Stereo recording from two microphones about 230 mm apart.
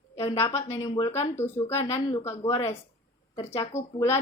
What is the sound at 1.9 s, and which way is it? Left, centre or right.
Speech, centre.